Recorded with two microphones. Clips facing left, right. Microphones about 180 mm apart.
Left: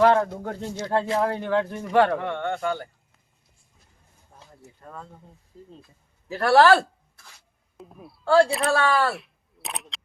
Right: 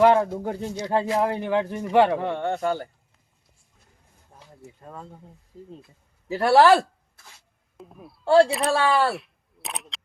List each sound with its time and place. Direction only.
0.0 s speech: 15° right (ahead or behind)
2.2 s speech: 30° right (ahead or behind)
4.8 s speech: 20° right (ahead or behind)
6.2 s speech: 25° right (ahead or behind)
7.8 s speech: centre (ahead or behind)
8.2 s speech: 25° right (ahead or behind)
8.4 s speech: centre (ahead or behind)
8.7 s speech: 20° right (ahead or behind)
9.1 s single-lens reflex camera: centre (ahead or behind)